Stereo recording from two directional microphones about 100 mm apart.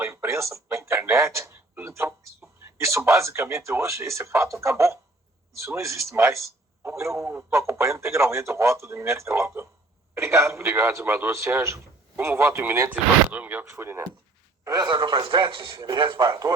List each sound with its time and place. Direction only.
0.0 s a sound: 25° right (ahead or behind)
4.6 s a man's voice: 30° right (ahead or behind)
12.9 s speech: 15° right (ahead or behind)
14.6 s a man's voice: 40° right (ahead or behind)